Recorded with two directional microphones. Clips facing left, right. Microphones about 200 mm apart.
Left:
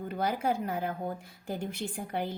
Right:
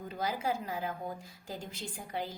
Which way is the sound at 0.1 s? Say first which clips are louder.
Left 4 dB; 60° left (ahead or behind).